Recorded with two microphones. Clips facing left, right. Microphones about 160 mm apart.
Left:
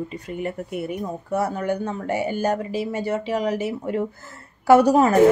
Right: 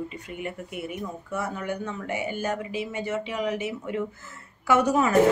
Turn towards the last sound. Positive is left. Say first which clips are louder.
# left 7 dB
turn(degrees=35)  # may be behind; listen again after turning